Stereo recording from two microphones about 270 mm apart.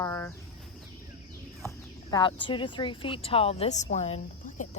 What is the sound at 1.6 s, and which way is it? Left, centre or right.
Speech, centre.